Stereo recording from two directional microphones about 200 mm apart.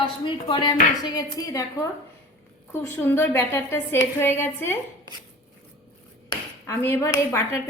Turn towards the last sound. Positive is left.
turn(degrees=15)  # may be behind; listen again after turning